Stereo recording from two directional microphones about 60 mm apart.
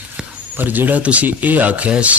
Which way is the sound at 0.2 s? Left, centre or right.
Centre.